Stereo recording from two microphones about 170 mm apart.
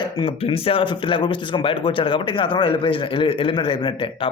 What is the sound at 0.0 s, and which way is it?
A man's voice, 30° left (ahead or behind).